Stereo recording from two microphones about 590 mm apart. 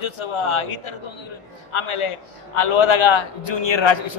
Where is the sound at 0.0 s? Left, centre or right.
Left.